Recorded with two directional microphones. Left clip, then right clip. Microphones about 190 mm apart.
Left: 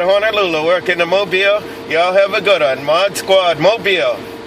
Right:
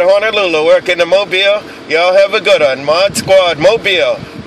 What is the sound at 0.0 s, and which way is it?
Speech, 35° right (ahead or behind).